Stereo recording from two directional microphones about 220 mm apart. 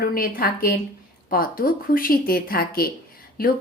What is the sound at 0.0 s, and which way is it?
A woman's voice, 40° left (ahead or behind).